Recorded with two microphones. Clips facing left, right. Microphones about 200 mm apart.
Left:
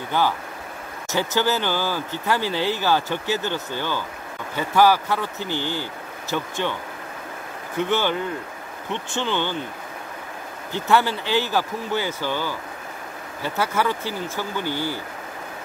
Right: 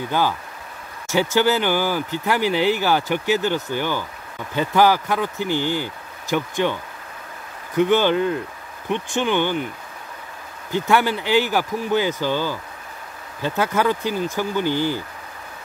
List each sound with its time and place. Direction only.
1.1 s speech: 15° right (ahead or behind)
10.7 s speech: 15° right (ahead or behind)